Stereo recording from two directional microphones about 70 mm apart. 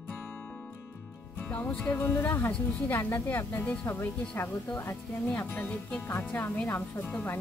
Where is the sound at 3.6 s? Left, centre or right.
Centre.